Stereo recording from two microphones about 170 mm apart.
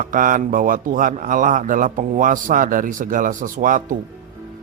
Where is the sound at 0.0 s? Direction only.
50° right (ahead or behind).